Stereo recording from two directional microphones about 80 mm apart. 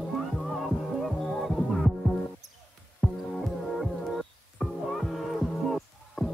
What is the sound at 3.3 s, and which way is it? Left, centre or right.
Music, centre.